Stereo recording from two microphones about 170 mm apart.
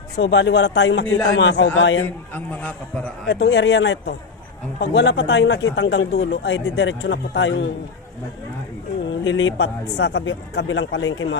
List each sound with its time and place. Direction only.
0.2 s speech: 85° left
2.3 s a man's voice: 10° left (ahead or behind)
3.2 s speech: 70° left (ahead or behind); by 7.7 s 90° left
9.2 s speech: 90° left